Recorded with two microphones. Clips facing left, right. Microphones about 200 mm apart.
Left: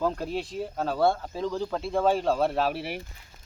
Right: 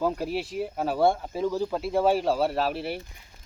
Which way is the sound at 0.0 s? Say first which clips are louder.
Right 1 dB; 10° right (ahead or behind).